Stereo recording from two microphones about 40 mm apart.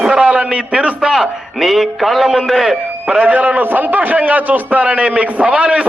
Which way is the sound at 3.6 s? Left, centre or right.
Right.